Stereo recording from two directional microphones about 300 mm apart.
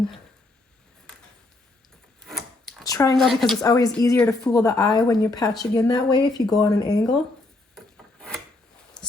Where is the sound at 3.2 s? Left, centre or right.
Centre.